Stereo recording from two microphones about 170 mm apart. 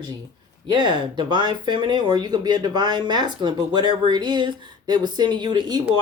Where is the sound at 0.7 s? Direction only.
30° right (ahead or behind).